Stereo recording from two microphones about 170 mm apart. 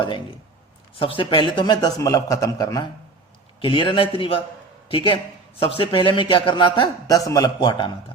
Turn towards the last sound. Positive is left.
turn(degrees=30)  # may be behind; listen again after turning